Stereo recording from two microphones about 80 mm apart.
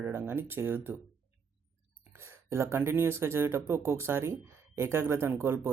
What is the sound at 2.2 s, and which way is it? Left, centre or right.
Speech, right.